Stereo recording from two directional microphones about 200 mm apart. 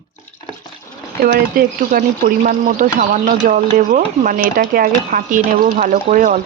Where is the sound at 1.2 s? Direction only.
45° right (ahead or behind).